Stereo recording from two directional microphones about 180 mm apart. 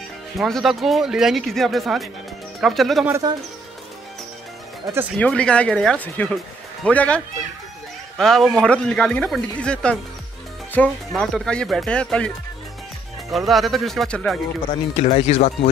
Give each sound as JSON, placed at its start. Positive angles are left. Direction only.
{"t": 0.4, "sound": "speech", "side_deg": 0}
{"t": 3.1, "sound": "speech", "side_deg": -20}
{"t": 5.2, "sound": "speech", "side_deg": 5}
{"t": 8.2, "sound": "speech", "side_deg": 0}
{"t": 13.3, "sound": "speech", "side_deg": 0}
{"t": 15.0, "sound": "speech", "side_deg": 35}